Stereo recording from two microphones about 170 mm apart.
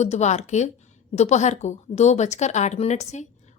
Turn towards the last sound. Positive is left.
turn(degrees=40)  # may be behind; listen again after turning